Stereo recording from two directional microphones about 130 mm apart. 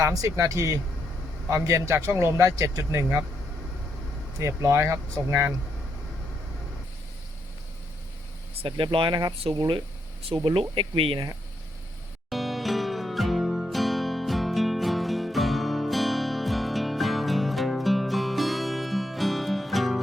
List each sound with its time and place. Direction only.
0.0 s speech: 25° right (ahead or behind)
4.4 s speech: 20° right (ahead or behind)
8.6 s speech: 40° right (ahead or behind)
12.3 s music: centre (ahead or behind)